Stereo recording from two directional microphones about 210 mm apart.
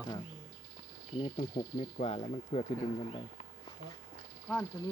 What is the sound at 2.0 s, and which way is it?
Speech, 30° left (ahead or behind).